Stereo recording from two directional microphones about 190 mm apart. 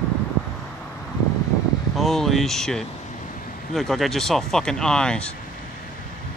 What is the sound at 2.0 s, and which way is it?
Speech, centre (ahead or behind).